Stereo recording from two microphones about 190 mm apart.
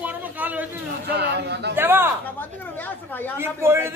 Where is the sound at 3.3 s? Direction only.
15° right (ahead or behind).